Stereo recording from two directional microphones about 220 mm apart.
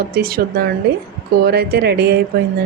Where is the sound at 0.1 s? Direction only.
45° right (ahead or behind).